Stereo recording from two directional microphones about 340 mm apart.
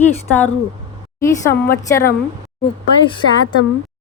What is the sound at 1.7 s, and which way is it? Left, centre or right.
Speech, centre.